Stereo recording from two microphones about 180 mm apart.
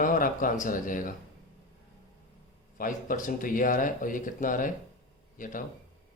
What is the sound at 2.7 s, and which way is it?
Speech, 50° left (ahead or behind).